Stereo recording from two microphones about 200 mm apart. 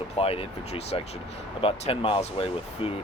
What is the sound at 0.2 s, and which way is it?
Speech, 30° left (ahead or behind).